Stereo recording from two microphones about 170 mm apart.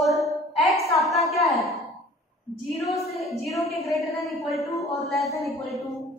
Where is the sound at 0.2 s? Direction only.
Centre (ahead or behind).